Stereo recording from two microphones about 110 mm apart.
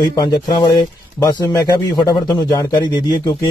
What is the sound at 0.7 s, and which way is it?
Speech, 35° left (ahead or behind).